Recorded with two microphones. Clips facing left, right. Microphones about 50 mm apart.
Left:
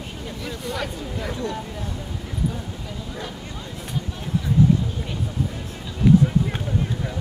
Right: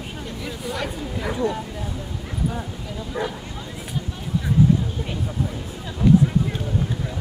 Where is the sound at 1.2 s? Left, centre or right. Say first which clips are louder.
Right 5 dB; centre.